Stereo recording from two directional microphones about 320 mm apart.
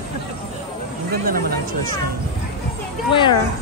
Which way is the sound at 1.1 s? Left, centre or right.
Right.